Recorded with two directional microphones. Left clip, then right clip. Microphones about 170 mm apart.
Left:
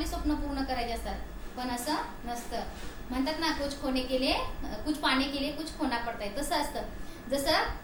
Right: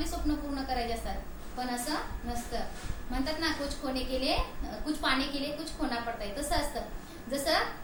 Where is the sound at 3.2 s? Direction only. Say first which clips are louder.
Left 2 dB; 15° left (ahead or behind).